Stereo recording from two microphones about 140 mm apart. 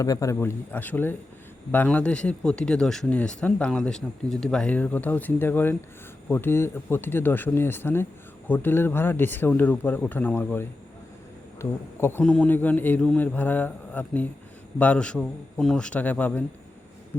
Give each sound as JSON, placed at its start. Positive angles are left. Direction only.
{"t": 0.0, "sound": "speech", "side_deg": 25}
{"t": 0.3, "sound": "speech", "side_deg": 10}
{"t": 12.2, "sound": "speech", "side_deg": 5}